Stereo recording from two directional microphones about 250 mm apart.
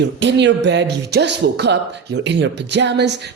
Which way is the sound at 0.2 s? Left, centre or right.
Right.